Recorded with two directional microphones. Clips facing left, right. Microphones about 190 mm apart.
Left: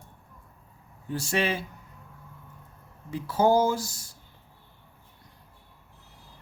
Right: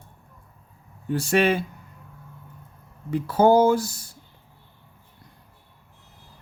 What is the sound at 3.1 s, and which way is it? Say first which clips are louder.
Speech: right 5 dB; 60° right (ahead or behind).